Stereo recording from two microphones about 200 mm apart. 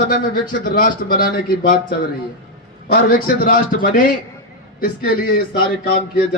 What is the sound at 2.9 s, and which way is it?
A man's voice, 45° left (ahead or behind).